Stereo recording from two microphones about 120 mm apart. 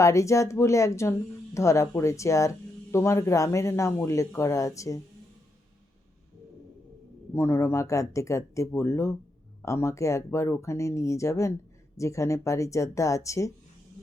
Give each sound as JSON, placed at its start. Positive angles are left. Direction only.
{"t": 0.0, "sound": "speech", "side_deg": 25}
{"t": 7.3, "sound": "speech", "side_deg": 20}